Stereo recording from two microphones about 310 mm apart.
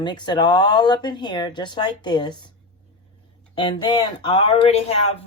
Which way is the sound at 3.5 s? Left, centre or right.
Centre.